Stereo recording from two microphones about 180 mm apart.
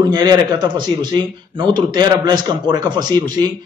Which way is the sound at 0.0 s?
25° right (ahead or behind).